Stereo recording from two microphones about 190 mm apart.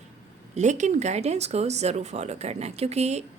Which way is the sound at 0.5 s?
40° right (ahead or behind).